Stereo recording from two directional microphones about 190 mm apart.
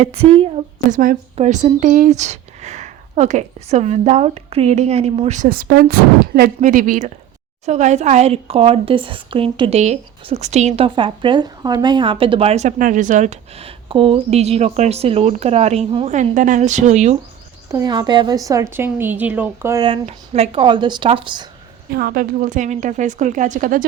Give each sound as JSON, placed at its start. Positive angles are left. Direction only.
{"t": 0.0, "sound": "speech", "side_deg": -30}
{"t": 17.7, "sound": "a woman's voice", "side_deg": -20}
{"t": 21.9, "sound": "a woman's voice", "side_deg": -50}